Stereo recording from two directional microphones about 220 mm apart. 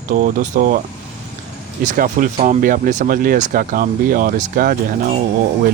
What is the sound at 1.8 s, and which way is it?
Speech, 40° right (ahead or behind).